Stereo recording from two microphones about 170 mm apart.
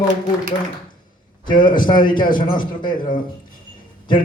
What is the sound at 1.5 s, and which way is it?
Speech, 55° left (ahead or behind).